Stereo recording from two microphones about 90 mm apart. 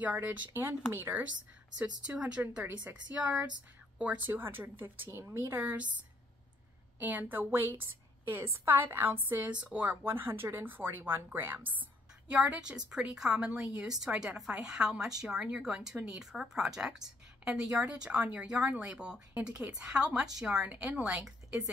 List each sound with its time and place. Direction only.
0.0 s a woman's voice: 15° right (ahead or behind)
1.8 s a woman's voice: 10° right (ahead or behind)
7.0 s a woman's voice: 20° right (ahead or behind)